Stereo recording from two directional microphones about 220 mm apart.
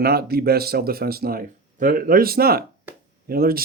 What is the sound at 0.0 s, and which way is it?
Speech, 45° right (ahead or behind).